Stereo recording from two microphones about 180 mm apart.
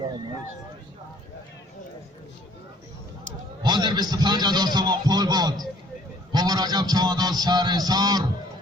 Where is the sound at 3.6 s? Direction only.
25° right (ahead or behind).